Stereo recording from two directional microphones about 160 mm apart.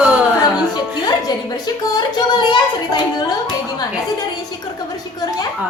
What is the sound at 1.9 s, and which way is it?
Speech, 30° left (ahead or behind).